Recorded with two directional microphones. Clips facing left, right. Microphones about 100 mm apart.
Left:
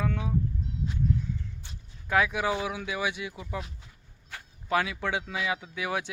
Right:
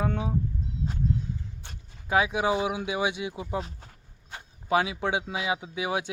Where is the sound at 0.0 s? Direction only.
30° right (ahead or behind).